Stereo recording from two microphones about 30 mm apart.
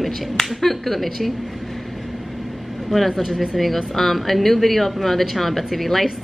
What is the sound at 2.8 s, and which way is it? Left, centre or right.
Speech, centre.